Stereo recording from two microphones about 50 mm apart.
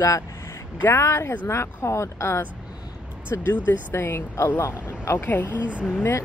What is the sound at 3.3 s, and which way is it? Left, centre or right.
Speech, left.